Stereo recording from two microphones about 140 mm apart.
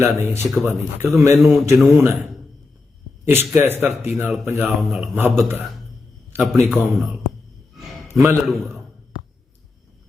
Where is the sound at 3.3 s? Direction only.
15° right (ahead or behind).